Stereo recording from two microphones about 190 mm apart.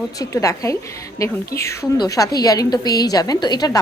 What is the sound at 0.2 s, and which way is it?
A woman's voice, 15° left (ahead or behind).